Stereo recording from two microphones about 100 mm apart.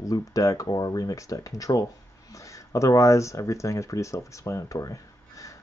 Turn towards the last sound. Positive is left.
turn(degrees=35)  # may be behind; listen again after turning